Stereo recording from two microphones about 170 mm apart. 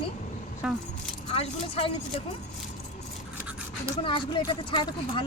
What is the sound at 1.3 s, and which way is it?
Speech, 35° left (ahead or behind).